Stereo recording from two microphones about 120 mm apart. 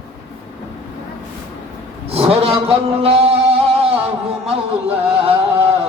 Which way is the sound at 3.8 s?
55° right (ahead or behind).